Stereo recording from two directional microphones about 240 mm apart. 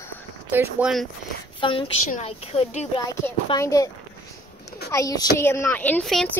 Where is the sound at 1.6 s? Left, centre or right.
Left.